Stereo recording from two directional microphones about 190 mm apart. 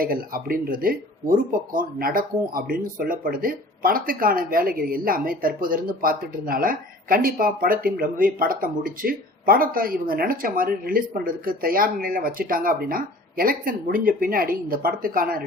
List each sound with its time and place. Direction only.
0.0 s speech: 50° right (ahead or behind)